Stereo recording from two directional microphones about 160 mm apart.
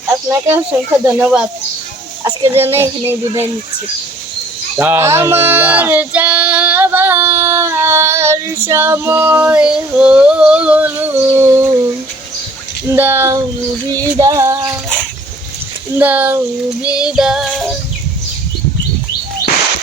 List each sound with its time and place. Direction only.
0.3 s speech: 15° right (ahead or behind)
4.8 s a sound: 15° right (ahead or behind)
12.9 s speech: 15° right (ahead or behind)
14.2 s a sound: 20° right (ahead or behind)
16.0 s speech: 10° right (ahead or behind)
16.8 s music: 5° right (ahead or behind)